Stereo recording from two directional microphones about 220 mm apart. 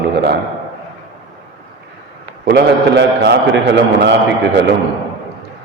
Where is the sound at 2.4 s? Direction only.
50° right (ahead or behind).